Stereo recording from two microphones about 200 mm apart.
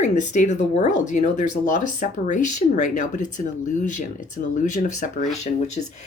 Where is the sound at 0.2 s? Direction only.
35° left (ahead or behind).